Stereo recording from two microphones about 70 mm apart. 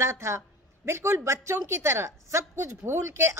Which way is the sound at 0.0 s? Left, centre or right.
Right.